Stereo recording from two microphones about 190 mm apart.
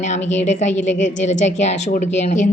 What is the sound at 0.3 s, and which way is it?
A woman's voice, 40° left (ahead or behind).